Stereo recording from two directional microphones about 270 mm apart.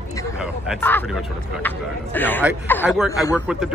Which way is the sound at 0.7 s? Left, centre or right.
Centre.